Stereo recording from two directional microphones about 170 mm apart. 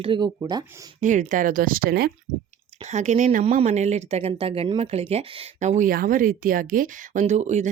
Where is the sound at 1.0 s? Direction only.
45° right (ahead or behind).